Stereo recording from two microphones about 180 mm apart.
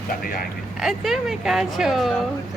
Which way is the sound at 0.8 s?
Centre (ahead or behind).